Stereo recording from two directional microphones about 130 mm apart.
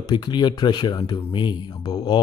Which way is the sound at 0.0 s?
35° left (ahead or behind).